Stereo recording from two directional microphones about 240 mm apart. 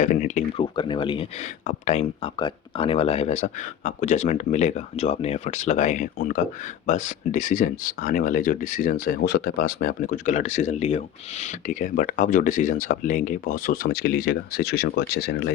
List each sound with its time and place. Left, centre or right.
0.0 s speech: left